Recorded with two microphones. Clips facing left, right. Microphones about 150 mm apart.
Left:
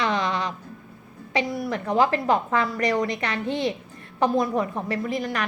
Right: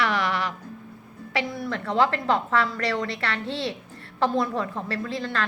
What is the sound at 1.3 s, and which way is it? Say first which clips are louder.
A woman's voice: left 3 dB; 15° left (ahead or behind).